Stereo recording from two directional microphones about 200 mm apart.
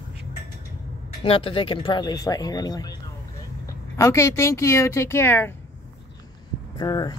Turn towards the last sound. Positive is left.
turn(degrees=20)  # may be behind; listen again after turning